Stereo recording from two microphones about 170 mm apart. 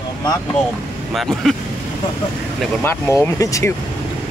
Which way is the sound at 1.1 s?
Centre (ahead or behind).